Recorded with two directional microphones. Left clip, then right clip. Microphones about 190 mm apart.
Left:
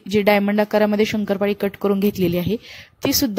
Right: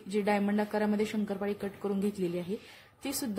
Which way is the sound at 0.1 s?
40° left (ahead or behind).